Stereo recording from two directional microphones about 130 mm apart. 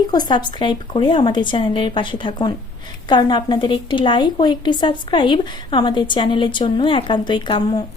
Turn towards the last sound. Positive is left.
turn(degrees=35)  # may be behind; listen again after turning